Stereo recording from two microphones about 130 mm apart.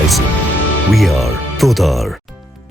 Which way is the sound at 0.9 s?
Centre (ahead or behind).